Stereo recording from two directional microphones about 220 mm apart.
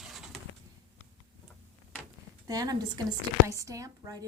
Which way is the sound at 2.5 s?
15° right (ahead or behind).